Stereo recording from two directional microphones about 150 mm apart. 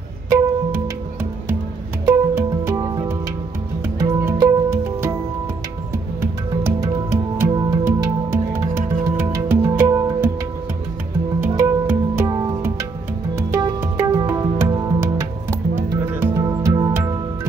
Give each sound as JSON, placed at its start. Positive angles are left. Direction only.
{"t": 0.3, "sound": "music", "side_deg": -15}
{"t": 2.0, "sound": "music", "side_deg": -20}
{"t": 6.6, "sound": "music", "side_deg": -15}
{"t": 11.4, "sound": "music", "side_deg": -15}